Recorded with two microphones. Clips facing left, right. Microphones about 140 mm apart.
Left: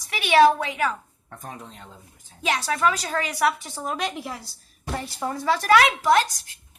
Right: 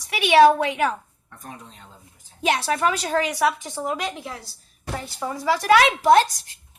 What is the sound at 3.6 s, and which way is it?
Speech, 15° right (ahead or behind).